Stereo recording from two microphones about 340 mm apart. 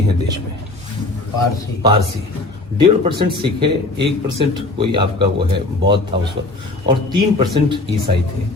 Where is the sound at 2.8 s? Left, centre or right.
Centre.